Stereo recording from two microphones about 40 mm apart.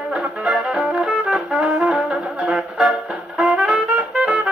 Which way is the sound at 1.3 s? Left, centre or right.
Right.